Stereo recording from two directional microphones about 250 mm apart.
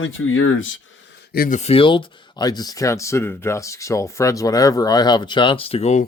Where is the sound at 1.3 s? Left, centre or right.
Left.